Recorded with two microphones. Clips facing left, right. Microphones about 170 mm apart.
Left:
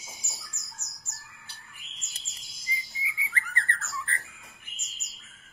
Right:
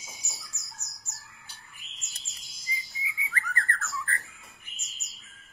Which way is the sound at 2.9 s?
20° left (ahead or behind).